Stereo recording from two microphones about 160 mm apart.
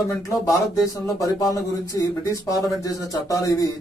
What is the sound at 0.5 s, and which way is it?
Speech, 20° left (ahead or behind).